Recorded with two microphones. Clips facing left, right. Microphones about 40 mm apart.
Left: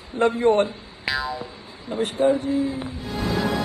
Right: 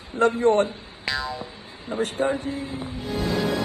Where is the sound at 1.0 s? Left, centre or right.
Centre.